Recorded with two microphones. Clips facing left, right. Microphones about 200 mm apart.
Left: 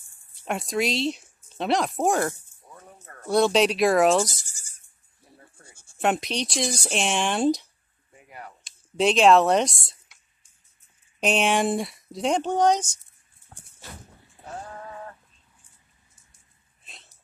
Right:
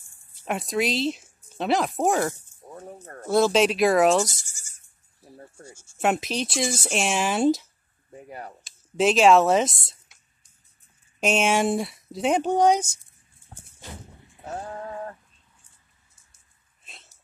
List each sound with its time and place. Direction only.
0.3 s speech: centre (ahead or behind)
2.6 s music: 30° right (ahead or behind)
3.3 s speech: centre (ahead or behind)
4.5 s bleat: 35° left (ahead or behind)
5.9 s speech: centre (ahead or behind)
8.1 s a sound: 35° right (ahead or behind)
8.6 s speech: centre (ahead or behind)
11.1 s speech: centre (ahead or behind)
14.5 s a sound: 35° right (ahead or behind)
16.8 s a sound: centre (ahead or behind)